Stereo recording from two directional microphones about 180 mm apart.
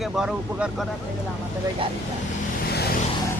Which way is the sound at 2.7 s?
60° left (ahead or behind).